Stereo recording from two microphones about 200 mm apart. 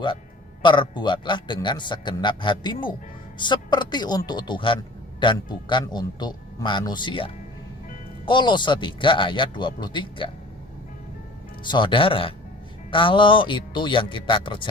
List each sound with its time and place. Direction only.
0.6 s a man's voice: 25° left (ahead or behind)
11.6 s a man's voice: 25° left (ahead or behind)